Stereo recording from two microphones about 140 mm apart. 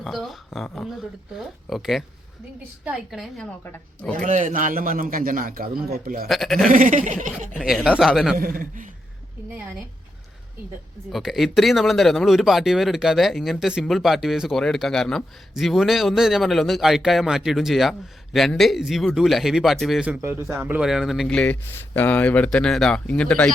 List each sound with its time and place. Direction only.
0.0 s speech: centre (ahead or behind)
4.2 s a man's voice: 65° right (ahead or behind); by 6.2 s 90° right
6.2 s speech: centre (ahead or behind)
6.7 s chuckle: 70° right (ahead or behind)
7.6 s speech: 5° right (ahead or behind)
8.4 s a man's voice: 90° right
11.1 s speech: centre (ahead or behind)